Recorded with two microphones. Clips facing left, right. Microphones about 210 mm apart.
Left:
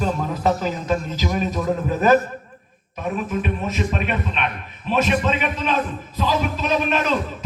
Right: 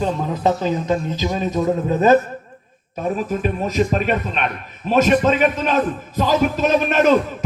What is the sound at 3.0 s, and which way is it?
A man's voice, 35° right (ahead or behind).